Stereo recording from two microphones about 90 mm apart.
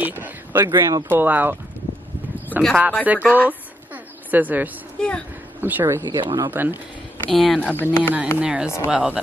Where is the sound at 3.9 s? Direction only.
20° right (ahead or behind).